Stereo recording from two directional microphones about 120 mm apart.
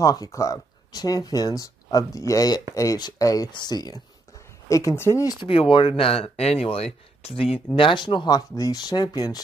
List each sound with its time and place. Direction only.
0.0 s speech: 30° left (ahead or behind)
5.4 s speech: 45° left (ahead or behind)
7.7 s speech: 45° left (ahead or behind)